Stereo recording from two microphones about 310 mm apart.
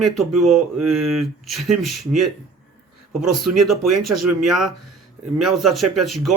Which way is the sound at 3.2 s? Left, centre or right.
Centre.